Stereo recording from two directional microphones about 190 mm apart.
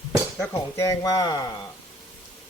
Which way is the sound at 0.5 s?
15° left (ahead or behind).